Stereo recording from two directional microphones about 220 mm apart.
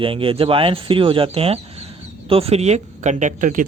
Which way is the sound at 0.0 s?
25° right (ahead or behind).